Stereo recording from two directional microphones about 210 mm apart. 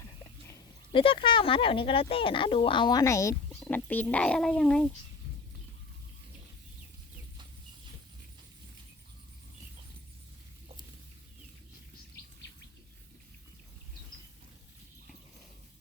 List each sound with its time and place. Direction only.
0.9 s speech: 25° left (ahead or behind); by 4.9 s 5° left (ahead or behind)